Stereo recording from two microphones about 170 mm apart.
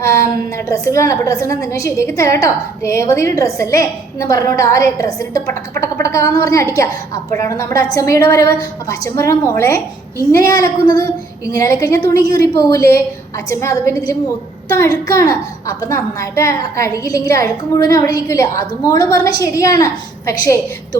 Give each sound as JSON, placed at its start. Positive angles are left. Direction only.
{"t": 0.0, "sound": "a woman's voice", "side_deg": 15}